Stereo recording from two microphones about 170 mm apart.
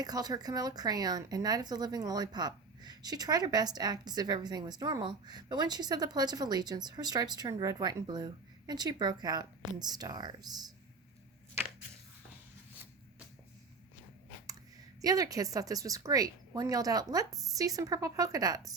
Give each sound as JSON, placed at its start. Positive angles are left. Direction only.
{"t": 0.0, "sound": "speech", "side_deg": -20}
{"t": 15.0, "sound": "speech", "side_deg": -20}